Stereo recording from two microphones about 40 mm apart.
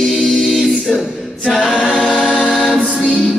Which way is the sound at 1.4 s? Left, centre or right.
Centre.